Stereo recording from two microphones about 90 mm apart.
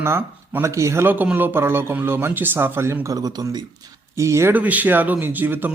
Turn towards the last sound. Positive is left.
turn(degrees=-20)  # may be behind; listen again after turning